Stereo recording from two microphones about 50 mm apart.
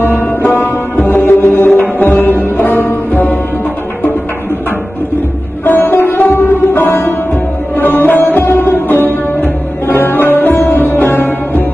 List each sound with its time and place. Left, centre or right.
1.0 s music: left
5.7 s sitar: left
7.7 s music: left